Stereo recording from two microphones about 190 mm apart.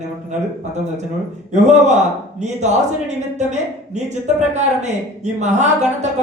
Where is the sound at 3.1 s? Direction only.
35° right (ahead or behind).